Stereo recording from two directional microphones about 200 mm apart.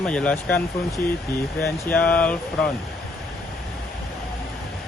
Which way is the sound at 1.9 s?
5° left (ahead or behind).